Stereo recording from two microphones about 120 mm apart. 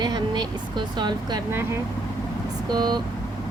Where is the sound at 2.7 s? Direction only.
35° right (ahead or behind).